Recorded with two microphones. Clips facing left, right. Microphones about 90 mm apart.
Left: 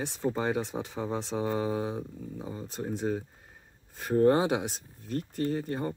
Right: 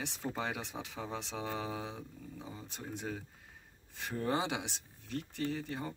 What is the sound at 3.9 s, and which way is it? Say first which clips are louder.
Speech: left 11 dB; 45° left (ahead or behind).